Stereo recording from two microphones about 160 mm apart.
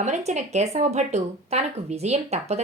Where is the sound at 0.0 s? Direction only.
45° right (ahead or behind).